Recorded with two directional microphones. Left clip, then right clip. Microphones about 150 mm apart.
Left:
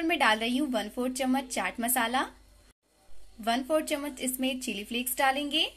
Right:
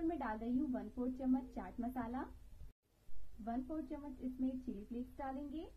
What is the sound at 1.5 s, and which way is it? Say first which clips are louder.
Speech: left 16 dB; 60° left (ahead or behind).